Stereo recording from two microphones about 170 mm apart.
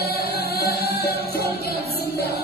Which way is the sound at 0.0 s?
65° left (ahead or behind).